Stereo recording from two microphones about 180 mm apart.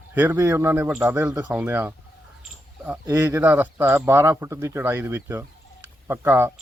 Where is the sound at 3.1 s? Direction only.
15° right (ahead or behind).